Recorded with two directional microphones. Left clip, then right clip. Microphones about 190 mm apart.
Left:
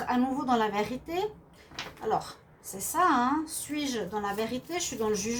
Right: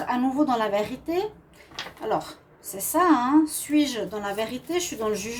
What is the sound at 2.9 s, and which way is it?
A woman's voice, 45° right (ahead or behind).